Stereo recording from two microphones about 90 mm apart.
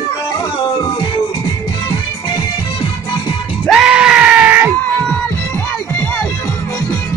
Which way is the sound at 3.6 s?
5° right (ahead or behind).